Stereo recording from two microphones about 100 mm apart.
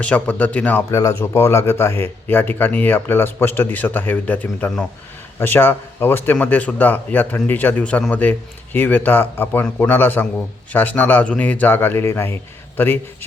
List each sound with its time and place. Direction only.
0.0 s a man's voice: 15° left (ahead or behind)
0.9 s a man's voice: 30° left (ahead or behind)